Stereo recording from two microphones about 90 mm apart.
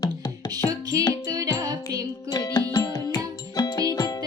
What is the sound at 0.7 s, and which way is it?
Music, 40° right (ahead or behind).